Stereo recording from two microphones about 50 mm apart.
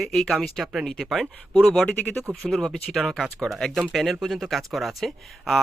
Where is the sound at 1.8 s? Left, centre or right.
Left.